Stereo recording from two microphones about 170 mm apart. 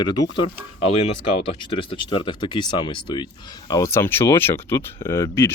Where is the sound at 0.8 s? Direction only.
35° left (ahead or behind).